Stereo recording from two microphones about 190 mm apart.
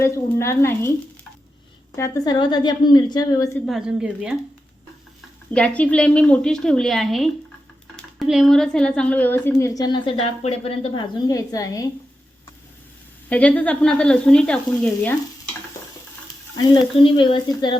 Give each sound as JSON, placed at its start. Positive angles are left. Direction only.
{"t": 0.0, "sound": "speech", "side_deg": 15}
{"t": 2.0, "sound": "a woman's voice", "side_deg": 15}
{"t": 3.7, "sound": "a woman's voice", "side_deg": -5}
{"t": 5.5, "sound": "a woman's voice", "side_deg": 5}
{"t": 11.3, "sound": "speech", "side_deg": 20}
{"t": 13.3, "sound": "a woman's voice", "side_deg": 5}
{"t": 16.6, "sound": "a woman's voice", "side_deg": 20}